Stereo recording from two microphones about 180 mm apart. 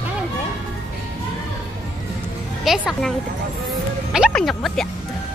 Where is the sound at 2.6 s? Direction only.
Centre (ahead or behind).